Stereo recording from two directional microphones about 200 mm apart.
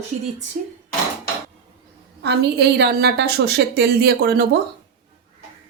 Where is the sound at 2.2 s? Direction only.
55° right (ahead or behind).